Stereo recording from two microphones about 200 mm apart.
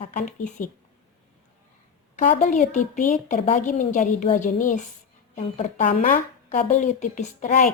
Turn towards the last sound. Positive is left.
turn(degrees=40)  # may be behind; listen again after turning